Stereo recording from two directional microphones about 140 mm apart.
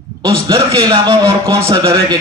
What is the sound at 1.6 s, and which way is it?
Speech, 20° right (ahead or behind).